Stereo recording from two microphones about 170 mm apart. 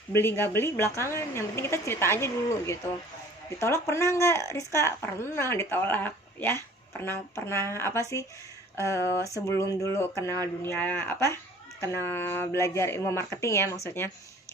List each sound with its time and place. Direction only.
0.1 s speech: 15° left (ahead or behind)